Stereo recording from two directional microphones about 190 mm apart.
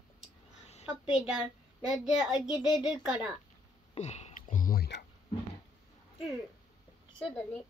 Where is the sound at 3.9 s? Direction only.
35° left (ahead or behind); by 5.1 s 55° left (ahead or behind).